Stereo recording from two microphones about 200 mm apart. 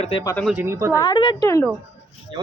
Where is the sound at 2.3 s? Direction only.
25° right (ahead or behind).